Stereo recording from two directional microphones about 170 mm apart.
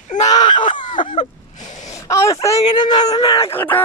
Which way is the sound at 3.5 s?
10° left (ahead or behind).